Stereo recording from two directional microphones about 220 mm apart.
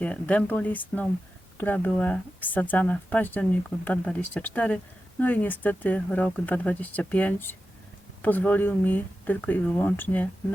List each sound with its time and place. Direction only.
0.0 s speech: 5° left (ahead or behind)